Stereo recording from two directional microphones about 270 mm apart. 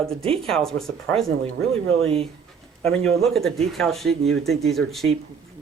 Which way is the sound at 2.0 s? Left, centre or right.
Right.